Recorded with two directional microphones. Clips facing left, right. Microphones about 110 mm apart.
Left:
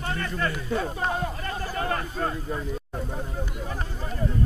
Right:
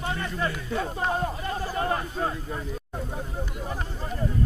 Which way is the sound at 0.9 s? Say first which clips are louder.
Right 1 dB; 30° right (ahead or behind).